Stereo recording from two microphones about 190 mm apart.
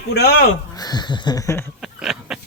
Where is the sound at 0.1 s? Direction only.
60° left (ahead or behind).